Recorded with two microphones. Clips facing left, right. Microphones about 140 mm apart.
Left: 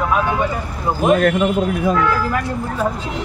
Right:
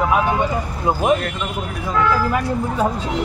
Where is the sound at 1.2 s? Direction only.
60° left (ahead or behind).